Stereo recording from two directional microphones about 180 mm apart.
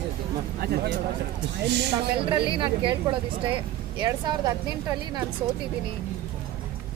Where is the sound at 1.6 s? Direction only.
70° right (ahead or behind).